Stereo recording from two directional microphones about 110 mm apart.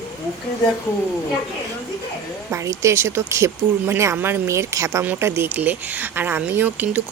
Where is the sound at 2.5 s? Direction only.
25° right (ahead or behind).